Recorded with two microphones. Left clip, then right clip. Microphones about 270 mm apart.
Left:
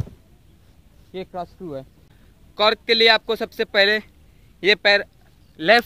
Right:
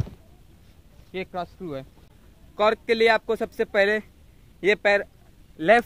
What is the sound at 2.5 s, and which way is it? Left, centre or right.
A man's voice, left.